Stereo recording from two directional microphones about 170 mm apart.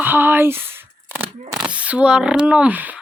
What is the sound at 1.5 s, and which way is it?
Speech, 5° right (ahead or behind).